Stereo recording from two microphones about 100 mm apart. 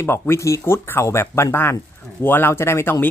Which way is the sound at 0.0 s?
25° left (ahead or behind).